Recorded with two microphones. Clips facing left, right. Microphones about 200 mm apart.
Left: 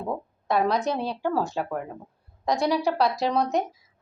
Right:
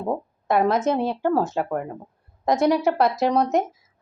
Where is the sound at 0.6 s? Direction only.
20° right (ahead or behind).